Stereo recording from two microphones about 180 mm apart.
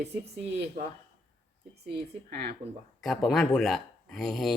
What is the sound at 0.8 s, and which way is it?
Speech, 45° right (ahead or behind).